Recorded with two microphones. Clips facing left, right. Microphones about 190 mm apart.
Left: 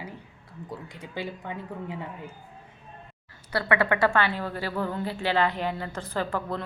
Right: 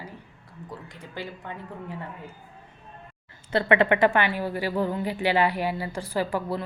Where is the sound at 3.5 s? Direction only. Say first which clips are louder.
Right 4 dB; 25° right (ahead or behind).